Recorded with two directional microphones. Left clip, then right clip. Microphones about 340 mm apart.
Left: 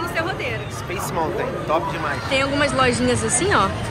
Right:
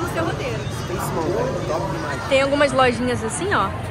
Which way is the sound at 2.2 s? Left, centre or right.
Centre.